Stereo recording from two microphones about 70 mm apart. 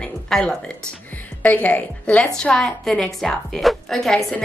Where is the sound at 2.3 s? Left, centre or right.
Centre.